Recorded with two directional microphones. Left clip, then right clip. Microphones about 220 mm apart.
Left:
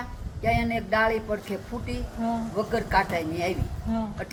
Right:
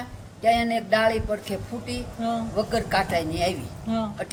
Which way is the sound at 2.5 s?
15° right (ahead or behind).